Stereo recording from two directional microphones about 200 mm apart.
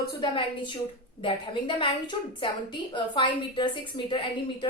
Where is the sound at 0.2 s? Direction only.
25° left (ahead or behind).